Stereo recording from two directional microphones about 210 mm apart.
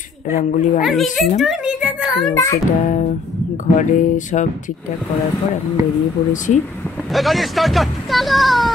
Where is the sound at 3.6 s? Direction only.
35° left (ahead or behind).